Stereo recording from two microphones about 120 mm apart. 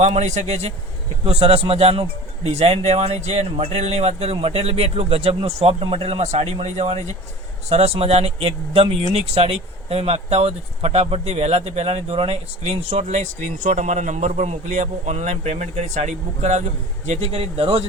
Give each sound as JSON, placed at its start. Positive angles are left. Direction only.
{"t": 0.0, "sound": "a man's voice", "side_deg": -70}
{"t": 1.2, "sound": "speech", "side_deg": -55}
{"t": 17.1, "sound": "speech", "side_deg": -60}